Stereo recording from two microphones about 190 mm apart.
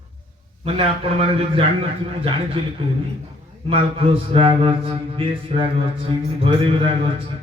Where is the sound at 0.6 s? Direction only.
30° right (ahead or behind).